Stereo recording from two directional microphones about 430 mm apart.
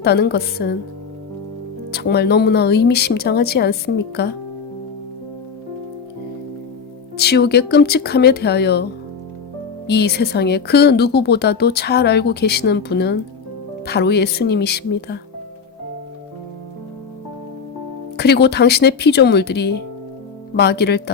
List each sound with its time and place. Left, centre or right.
0.0 s speech: left
1.9 s speech: left
7.2 s speech: left
9.8 s speech: left
18.2 s speech: left